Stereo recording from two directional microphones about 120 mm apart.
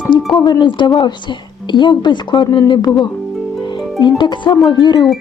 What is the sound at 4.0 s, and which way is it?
Speech, 40° left (ahead or behind).